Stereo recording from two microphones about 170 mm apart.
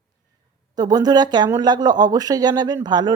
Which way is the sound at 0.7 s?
25° right (ahead or behind).